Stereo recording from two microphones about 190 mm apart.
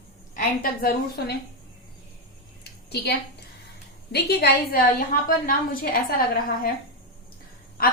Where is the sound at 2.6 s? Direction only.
60° left (ahead or behind).